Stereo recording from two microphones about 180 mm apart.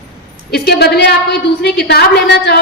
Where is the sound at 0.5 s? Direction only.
65° left (ahead or behind).